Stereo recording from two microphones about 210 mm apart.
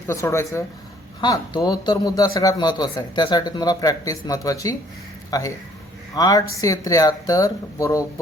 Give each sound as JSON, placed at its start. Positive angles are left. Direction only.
{"t": 0.1, "sound": "a man's voice", "side_deg": 15}